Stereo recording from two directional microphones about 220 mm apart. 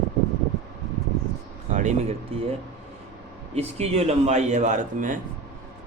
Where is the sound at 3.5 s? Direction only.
30° right (ahead or behind).